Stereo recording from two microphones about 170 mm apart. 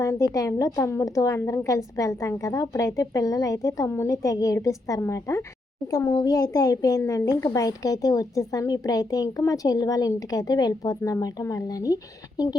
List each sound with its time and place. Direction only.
0.0 s a child's voice: 20° left (ahead or behind)